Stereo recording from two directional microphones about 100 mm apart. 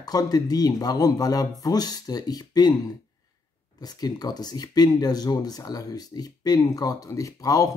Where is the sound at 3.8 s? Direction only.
40° left (ahead or behind).